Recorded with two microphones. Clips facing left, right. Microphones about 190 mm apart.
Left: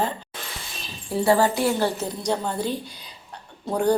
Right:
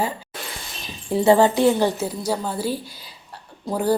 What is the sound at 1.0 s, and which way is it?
Speech, 20° right (ahead or behind).